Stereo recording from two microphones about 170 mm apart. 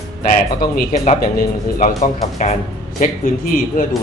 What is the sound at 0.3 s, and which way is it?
Speech, 55° left (ahead or behind).